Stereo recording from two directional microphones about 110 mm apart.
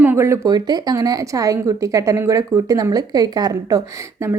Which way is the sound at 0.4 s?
40° right (ahead or behind).